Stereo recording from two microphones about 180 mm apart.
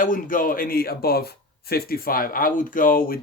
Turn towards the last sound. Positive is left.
turn(degrees=55)  # may be behind; listen again after turning